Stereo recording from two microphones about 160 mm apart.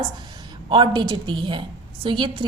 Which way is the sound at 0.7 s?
30° right (ahead or behind).